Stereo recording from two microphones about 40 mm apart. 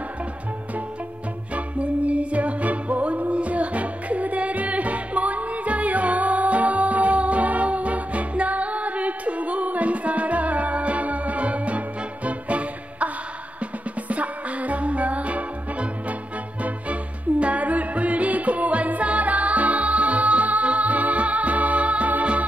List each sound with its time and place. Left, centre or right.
1.5 s music: right